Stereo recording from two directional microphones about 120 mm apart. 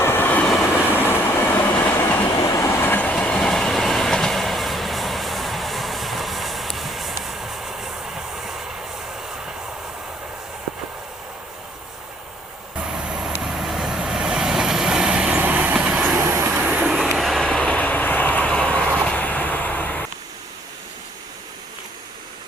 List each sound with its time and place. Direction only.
0.0 s train: 15° left (ahead or behind); by 7.7 s centre (ahead or behind)
13.1 s vehicle: 5° right (ahead or behind); by 20.0 s 15° left (ahead or behind)